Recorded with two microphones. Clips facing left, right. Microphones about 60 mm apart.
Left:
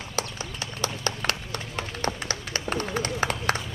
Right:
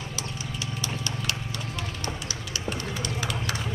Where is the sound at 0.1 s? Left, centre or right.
Left.